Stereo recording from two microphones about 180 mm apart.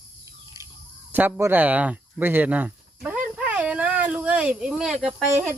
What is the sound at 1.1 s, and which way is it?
Speech, 10° right (ahead or behind).